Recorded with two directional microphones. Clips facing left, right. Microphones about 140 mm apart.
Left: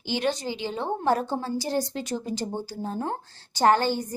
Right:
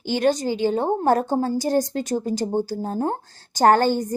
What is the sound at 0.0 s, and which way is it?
A woman's voice, 45° right (ahead or behind).